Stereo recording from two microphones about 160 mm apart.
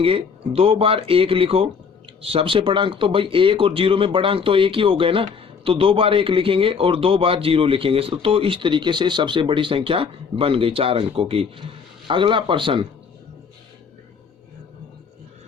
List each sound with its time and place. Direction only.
0.0 s speech: 35° right (ahead or behind)